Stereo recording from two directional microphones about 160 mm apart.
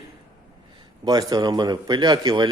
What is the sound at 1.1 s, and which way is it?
Speech, 25° right (ahead or behind).